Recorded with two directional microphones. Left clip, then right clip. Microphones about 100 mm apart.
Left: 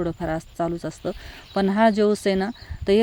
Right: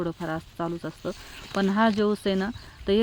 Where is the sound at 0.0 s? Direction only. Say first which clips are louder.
Left 4 dB; 35° left (ahead or behind).